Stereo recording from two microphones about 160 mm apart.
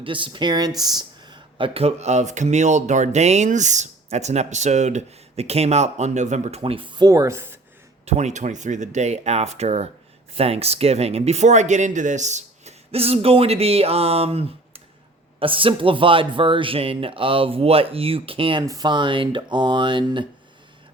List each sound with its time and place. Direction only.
0.0 s speech: 30° right (ahead or behind)
8.0 s speech: 45° right (ahead or behind)
18.6 s speech: 25° right (ahead or behind)